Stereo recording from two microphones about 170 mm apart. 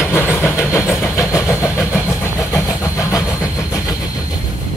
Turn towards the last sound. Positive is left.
turn(degrees=20)  # may be behind; listen again after turning